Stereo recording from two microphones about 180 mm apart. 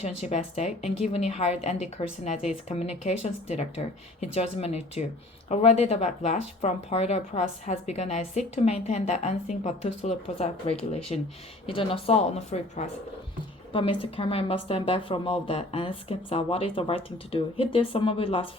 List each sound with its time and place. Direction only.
0.3 s speech: 40° left (ahead or behind)